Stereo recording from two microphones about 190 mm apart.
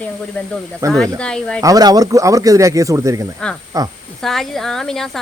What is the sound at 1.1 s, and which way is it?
Speech, 5° left (ahead or behind).